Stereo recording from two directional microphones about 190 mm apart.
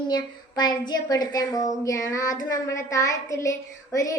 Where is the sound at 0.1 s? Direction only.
20° left (ahead or behind).